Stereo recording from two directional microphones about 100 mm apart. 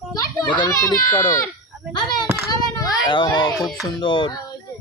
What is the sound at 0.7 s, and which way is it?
Speech, 35° left (ahead or behind).